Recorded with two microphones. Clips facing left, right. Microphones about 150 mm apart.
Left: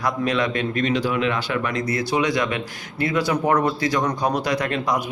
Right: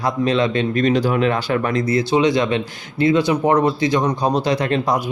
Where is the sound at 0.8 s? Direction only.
40° right (ahead or behind).